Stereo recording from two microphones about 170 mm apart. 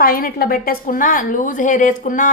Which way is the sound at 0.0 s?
60° left (ahead or behind).